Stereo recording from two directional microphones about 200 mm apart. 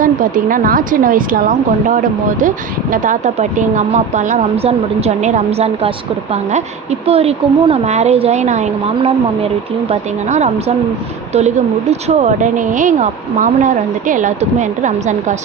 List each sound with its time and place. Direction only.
0.0 s a woman's voice: 45° right (ahead or behind)
7.0 s speech: 30° right (ahead or behind)